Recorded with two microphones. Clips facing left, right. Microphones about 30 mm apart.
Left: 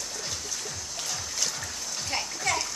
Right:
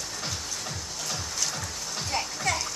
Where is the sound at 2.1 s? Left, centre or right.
Centre.